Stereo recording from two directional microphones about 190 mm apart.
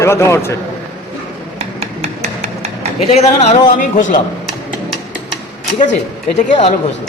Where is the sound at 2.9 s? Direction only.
35° left (ahead or behind).